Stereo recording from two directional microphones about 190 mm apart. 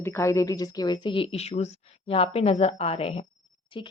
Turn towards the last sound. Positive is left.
turn(degrees=30)  # may be behind; listen again after turning